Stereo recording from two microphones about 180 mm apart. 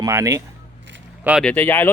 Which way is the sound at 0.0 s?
15° right (ahead or behind).